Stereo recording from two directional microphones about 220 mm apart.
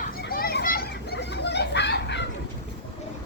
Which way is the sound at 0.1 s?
40° left (ahead or behind).